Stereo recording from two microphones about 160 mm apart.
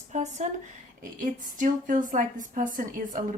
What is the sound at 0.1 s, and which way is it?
A woman's voice, 45° right (ahead or behind).